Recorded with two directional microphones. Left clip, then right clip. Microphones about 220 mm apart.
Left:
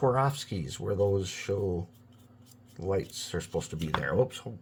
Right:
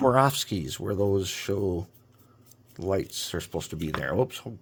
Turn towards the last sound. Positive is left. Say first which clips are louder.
# right 1 dB
turn(degrees=-45)  # may be behind; listen again after turning